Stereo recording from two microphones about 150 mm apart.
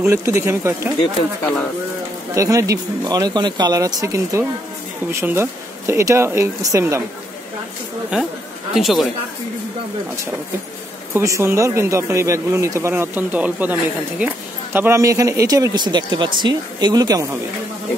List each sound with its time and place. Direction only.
0.0 s speech: 15° right (ahead or behind)
2.3 s speech: 20° right (ahead or behind)
8.1 s speech: 5° right (ahead or behind)
11.1 s speech: 20° right (ahead or behind)